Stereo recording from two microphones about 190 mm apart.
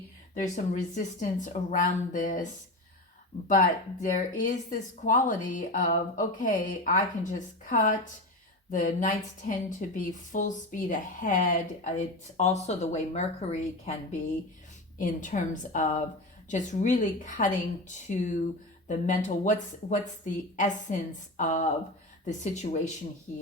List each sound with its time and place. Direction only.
0.3 s a woman's voice: 40° left (ahead or behind)
4.0 s a woman's voice: 45° left (ahead or behind)
14.9 s a woman's voice: 40° left (ahead or behind)